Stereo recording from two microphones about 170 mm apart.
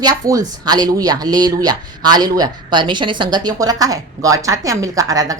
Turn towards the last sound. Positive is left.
turn(degrees=-20)  # may be behind; listen again after turning